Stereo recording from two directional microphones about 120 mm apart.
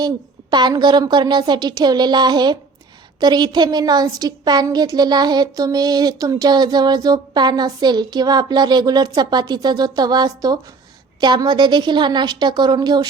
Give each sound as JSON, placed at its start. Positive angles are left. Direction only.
{"t": 0.5, "sound": "a woman's voice", "side_deg": -35}